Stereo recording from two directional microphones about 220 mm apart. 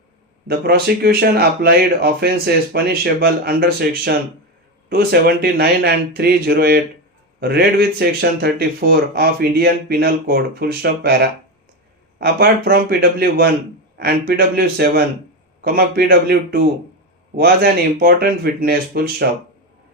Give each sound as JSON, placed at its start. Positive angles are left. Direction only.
{"t": 0.4, "sound": "speech", "side_deg": -45}